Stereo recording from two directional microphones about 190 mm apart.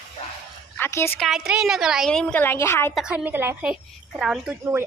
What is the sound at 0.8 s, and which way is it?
Speech, 15° left (ahead or behind).